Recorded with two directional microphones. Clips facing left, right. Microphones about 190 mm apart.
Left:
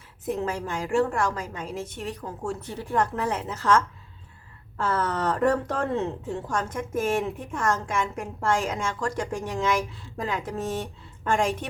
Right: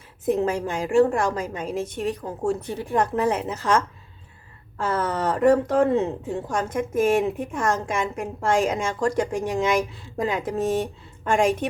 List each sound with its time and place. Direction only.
0.3 s a woman's voice: 15° right (ahead or behind)